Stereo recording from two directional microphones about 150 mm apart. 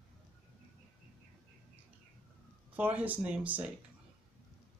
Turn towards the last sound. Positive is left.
turn(degrees=-10)  # may be behind; listen again after turning